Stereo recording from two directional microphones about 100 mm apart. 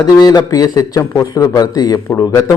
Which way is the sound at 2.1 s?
25° left (ahead or behind).